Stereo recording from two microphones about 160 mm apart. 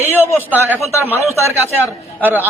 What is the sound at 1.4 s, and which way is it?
Speech, 15° right (ahead or behind).